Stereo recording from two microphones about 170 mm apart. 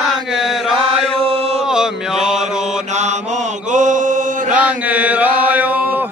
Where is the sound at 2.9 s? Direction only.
45° right (ahead or behind).